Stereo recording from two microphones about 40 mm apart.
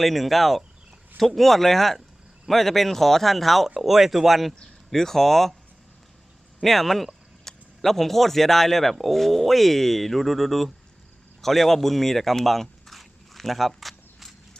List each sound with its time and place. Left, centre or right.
0.0 s a man's voice: centre
6.6 s a man's voice: centre
11.4 s a sound: centre